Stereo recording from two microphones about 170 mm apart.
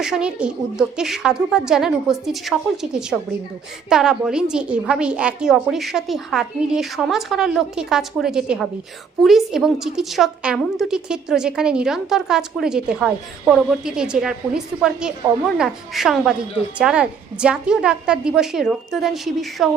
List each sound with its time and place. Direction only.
0.0 s a woman's voice: 5° right (ahead or behind)